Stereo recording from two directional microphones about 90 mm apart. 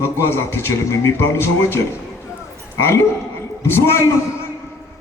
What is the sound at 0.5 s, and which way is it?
A man's voice, 30° left (ahead or behind).